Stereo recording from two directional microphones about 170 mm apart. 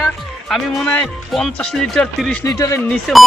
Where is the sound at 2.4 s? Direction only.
20° left (ahead or behind).